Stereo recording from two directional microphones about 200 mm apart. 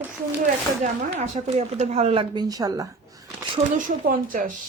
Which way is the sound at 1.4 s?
35° right (ahead or behind).